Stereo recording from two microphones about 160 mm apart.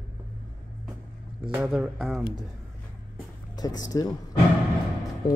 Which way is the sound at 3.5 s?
25° left (ahead or behind).